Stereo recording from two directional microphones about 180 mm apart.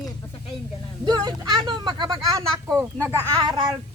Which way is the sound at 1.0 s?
25° right (ahead or behind).